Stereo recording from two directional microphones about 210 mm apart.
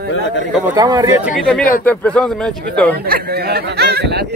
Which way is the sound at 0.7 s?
15° right (ahead or behind).